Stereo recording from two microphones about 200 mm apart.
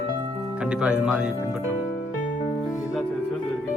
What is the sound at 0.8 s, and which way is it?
Speech, 5° right (ahead or behind).